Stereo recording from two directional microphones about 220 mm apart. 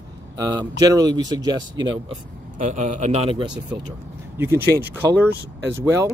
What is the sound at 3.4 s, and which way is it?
Speech, 20° right (ahead or behind).